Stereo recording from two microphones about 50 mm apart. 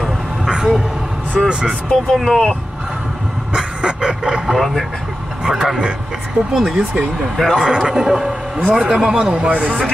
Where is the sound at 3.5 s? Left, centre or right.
Centre.